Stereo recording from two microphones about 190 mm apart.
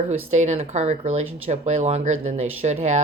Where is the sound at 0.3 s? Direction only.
35° right (ahead or behind).